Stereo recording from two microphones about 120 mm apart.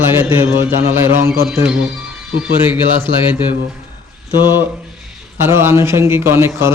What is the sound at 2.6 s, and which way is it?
Speech, 15° right (ahead or behind).